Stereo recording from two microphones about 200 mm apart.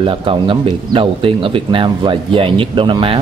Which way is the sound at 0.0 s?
25° right (ahead or behind).